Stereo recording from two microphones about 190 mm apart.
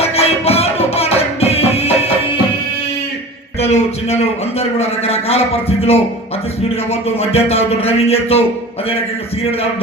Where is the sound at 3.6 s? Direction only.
35° left (ahead or behind).